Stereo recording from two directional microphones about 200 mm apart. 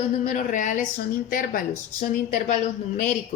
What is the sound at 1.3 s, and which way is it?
Speech, 45° left (ahead or behind).